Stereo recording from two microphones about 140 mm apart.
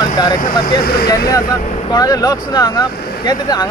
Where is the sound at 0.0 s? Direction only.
30° left (ahead or behind).